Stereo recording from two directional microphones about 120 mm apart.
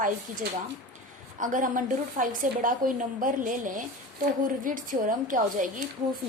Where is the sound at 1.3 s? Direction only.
90° right.